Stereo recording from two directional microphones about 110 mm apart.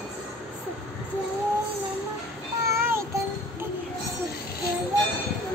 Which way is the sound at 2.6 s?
25° right (ahead or behind).